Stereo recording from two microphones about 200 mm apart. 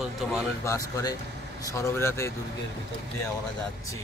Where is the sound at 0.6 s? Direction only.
15° left (ahead or behind).